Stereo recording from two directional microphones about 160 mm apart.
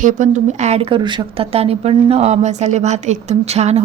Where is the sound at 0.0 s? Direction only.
50° right (ahead or behind).